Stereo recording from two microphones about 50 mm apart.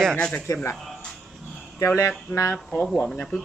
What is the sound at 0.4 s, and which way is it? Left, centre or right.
Speech, left.